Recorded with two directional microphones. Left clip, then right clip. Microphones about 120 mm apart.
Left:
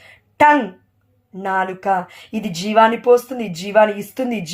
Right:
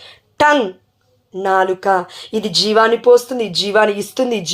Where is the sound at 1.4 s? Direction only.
30° right (ahead or behind).